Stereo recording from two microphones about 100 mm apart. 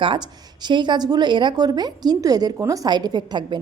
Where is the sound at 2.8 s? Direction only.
45° right (ahead or behind).